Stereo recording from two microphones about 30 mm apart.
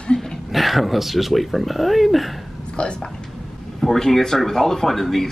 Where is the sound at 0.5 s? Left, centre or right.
Centre.